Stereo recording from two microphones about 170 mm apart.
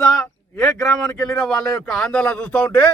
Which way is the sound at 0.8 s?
20° left (ahead or behind).